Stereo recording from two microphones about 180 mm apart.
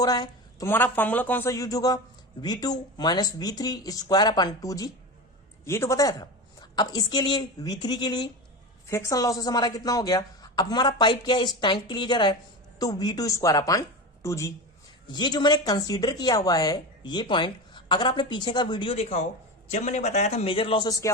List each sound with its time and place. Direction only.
0.0 s a woman's voice: 20° left (ahead or behind)